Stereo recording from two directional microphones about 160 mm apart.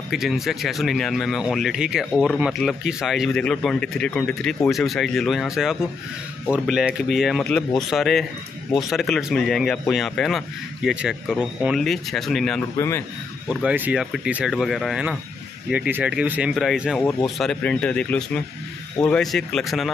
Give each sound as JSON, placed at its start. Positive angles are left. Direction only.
{"t": 0.1, "sound": "speech", "side_deg": 0}
{"t": 12.7, "sound": "speech", "side_deg": 15}
{"t": 13.5, "sound": "speech", "side_deg": -5}